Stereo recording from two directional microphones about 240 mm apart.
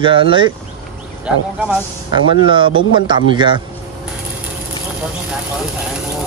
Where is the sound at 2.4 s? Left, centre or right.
Centre.